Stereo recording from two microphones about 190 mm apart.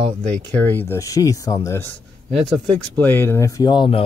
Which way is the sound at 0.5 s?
10° left (ahead or behind).